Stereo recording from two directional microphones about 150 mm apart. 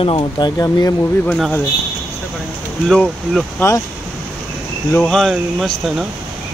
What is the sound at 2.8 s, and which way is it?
Speech, 5° left (ahead or behind).